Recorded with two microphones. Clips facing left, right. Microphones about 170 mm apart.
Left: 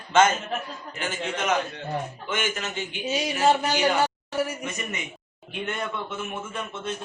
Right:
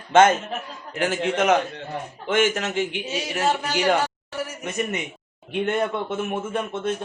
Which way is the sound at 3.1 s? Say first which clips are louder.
Left 7 dB; 15° left (ahead or behind).